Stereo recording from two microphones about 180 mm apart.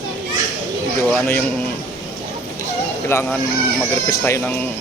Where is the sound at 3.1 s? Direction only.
15° left (ahead or behind).